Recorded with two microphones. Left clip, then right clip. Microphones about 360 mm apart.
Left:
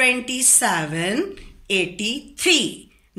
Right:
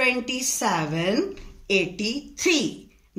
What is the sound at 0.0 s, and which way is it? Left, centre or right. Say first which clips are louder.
A woman's voice: left 4 dB; right.